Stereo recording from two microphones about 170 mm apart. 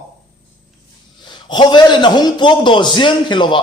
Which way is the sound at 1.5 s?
25° left (ahead or behind).